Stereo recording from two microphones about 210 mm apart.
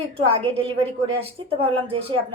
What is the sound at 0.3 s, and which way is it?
A woman's voice, 25° right (ahead or behind).